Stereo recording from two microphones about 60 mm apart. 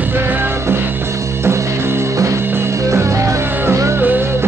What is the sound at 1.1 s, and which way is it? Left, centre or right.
Music, right.